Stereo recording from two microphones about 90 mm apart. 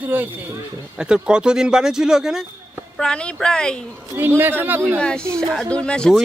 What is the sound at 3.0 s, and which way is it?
Speech, 10° left (ahead or behind).